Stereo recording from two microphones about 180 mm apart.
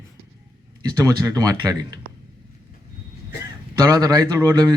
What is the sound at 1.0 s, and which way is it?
Speech, 20° right (ahead or behind).